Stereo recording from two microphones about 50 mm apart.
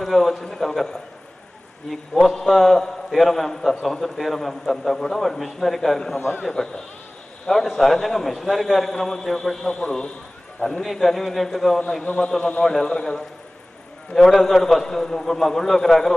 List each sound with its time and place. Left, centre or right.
0.0 s a sound: centre
1.9 s a man's voice: centre
6.1 s a man's voice: left
6.4 s a man's voice: centre
10.8 s a man's voice: centre
12.0 s a man's voice: left; by 16.2 s centre